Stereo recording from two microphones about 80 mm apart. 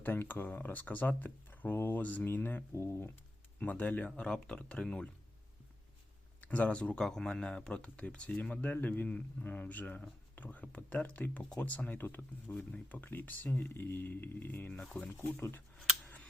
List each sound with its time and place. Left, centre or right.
0.0 s speech: left
3.6 s speech: centre
6.4 s speech: centre